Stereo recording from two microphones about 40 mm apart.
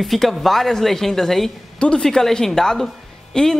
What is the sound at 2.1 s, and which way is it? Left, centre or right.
Speech, centre.